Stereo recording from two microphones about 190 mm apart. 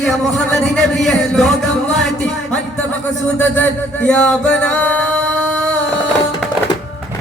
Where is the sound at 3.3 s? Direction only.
10° left (ahead or behind).